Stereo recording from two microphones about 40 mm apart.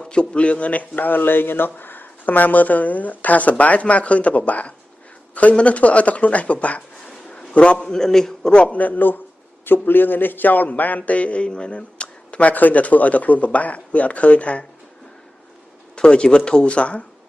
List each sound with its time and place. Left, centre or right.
0.1 s speech: left
0.9 s speech: left
7.2 s a sound: left
7.8 s a man's voice: centre
8.7 s a man's voice: left
16.0 s speech: left